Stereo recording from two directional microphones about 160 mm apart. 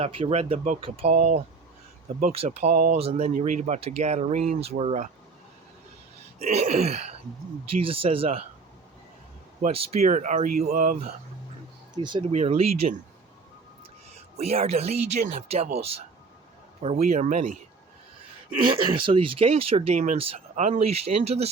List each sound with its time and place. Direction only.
0.0 s speech: 40° right (ahead or behind)
6.4 s speech: 45° right (ahead or behind)
9.6 s speech: 50° right (ahead or behind)
12.0 s speech: 30° right (ahead or behind)
12.3 s speech: 40° right (ahead or behind)
14.3 s speech: 40° right (ahead or behind)
16.8 s speech: 45° right (ahead or behind)
18.9 s speech: 35° right (ahead or behind)